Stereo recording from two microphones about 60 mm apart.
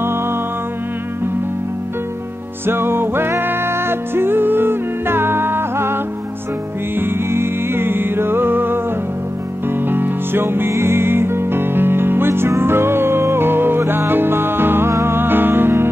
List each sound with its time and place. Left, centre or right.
2.6 s music: right
7.0 s music: right